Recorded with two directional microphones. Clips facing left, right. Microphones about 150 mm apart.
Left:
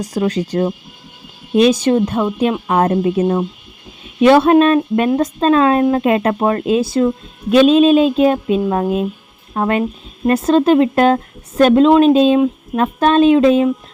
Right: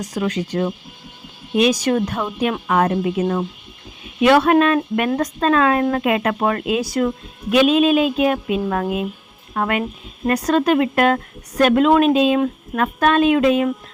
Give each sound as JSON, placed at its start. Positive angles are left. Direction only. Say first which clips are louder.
{"t": 0.0, "sound": "speech", "louder": "left 4 dB", "side_deg": 30}
{"t": 1.7, "sound": "speech", "louder": "left 5 dB", "side_deg": 25}